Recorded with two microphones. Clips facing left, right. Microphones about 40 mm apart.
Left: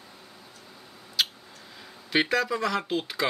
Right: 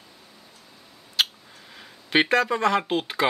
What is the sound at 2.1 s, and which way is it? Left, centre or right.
Speech, right.